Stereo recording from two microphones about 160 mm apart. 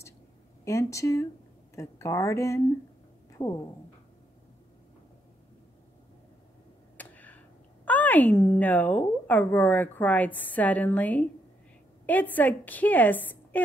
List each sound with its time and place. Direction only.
0.7 s speech: 20° left (ahead or behind)
7.0 s a woman's voice: 10° left (ahead or behind)